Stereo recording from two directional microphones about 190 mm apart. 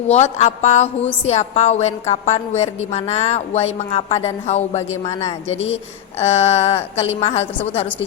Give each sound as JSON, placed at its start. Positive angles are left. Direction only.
{"t": 0.1, "sound": "speech", "side_deg": 35}